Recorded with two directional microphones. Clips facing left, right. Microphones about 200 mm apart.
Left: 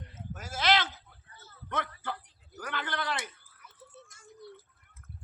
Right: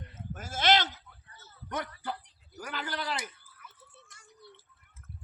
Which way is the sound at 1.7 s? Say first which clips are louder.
Even; 15° right (ahead or behind).